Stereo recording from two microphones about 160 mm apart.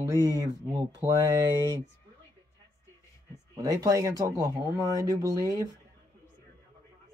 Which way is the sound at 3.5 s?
20° right (ahead or behind).